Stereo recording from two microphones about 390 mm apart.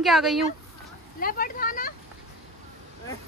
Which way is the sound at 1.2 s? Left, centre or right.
Left.